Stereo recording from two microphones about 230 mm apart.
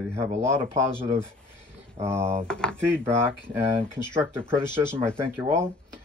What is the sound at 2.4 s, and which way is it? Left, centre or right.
Speech, centre.